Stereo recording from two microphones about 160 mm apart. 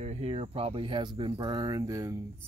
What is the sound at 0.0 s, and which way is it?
Speech, 40° right (ahead or behind).